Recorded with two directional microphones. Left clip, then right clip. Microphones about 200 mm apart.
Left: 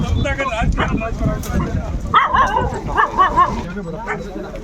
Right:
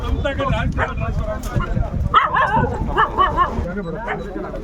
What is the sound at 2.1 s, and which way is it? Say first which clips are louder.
Dog: left 2 dB; 55° left (ahead or behind).